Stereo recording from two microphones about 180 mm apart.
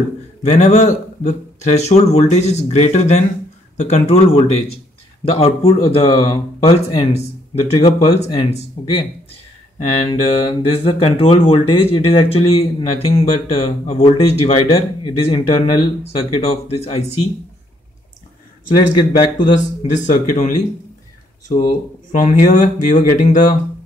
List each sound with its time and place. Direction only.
0.4 s speech: 40° left (ahead or behind)
19.8 s speech: 40° left (ahead or behind)